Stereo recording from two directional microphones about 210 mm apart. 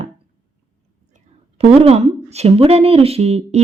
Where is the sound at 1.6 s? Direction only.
25° right (ahead or behind).